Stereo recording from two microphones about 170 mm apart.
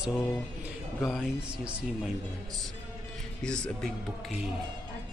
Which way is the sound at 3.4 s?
5° left (ahead or behind).